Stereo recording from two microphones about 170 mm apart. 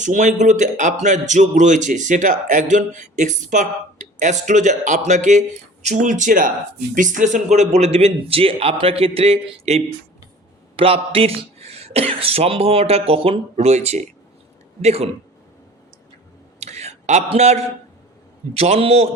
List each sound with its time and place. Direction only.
0.0 s speech: 45° right (ahead or behind)
16.6 s a sound: 40° right (ahead or behind)
18.5 s speech: 35° right (ahead or behind)